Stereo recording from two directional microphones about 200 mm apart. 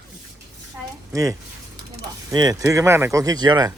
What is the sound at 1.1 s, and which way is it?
Speech, 15° right (ahead or behind).